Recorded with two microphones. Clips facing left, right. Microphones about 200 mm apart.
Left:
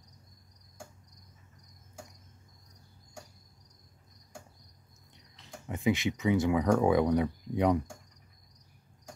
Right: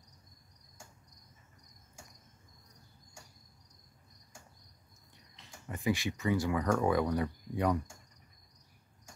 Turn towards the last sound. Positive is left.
turn(degrees=20)  # may be behind; listen again after turning